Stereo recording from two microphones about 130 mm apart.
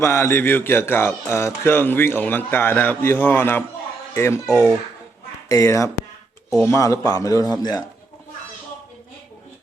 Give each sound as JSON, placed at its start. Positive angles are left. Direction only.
{"t": 0.0, "sound": "a man's voice", "side_deg": 20}